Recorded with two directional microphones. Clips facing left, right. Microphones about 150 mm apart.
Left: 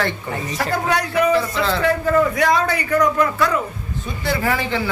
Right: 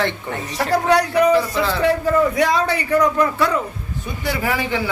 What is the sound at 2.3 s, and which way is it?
Speech, 30° right (ahead or behind).